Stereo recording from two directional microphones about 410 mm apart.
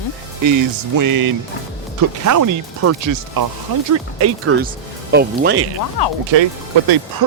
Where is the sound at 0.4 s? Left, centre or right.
Right.